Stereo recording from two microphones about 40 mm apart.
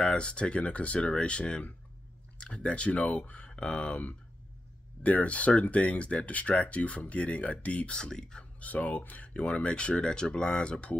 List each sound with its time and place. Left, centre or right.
0.1 s speech: left
5.0 s speech: left
7.9 s speech: centre
8.5 s speech: left
9.3 s speech: left